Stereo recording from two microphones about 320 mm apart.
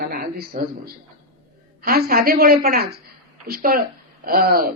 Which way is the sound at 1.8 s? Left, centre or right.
Right.